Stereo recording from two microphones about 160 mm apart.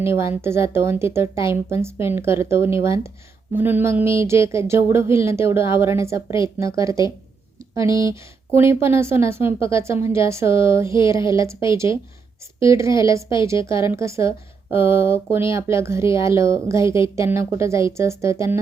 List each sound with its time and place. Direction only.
0.0 s a woman's voice: 15° right (ahead or behind)